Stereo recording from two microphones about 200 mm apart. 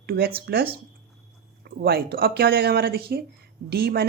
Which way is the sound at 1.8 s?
50° right (ahead or behind).